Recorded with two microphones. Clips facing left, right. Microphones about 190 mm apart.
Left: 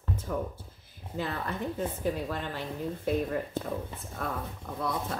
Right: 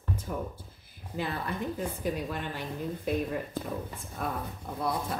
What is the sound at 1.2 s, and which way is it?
Speech, 10° right (ahead or behind).